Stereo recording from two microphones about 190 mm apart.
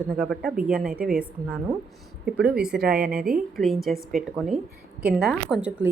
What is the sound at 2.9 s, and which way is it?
Speech, 50° right (ahead or behind).